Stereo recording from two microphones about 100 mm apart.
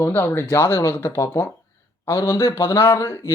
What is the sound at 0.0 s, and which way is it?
Speech, 20° left (ahead or behind).